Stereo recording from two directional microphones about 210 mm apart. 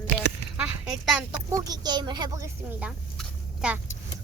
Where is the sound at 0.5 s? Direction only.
5° right (ahead or behind).